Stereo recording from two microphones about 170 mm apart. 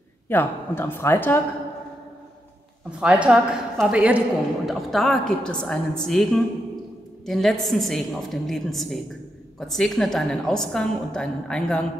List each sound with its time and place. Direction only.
0.3 s a woman's voice: 10° left (ahead or behind)
3.0 s a woman's voice: 5° right (ahead or behind)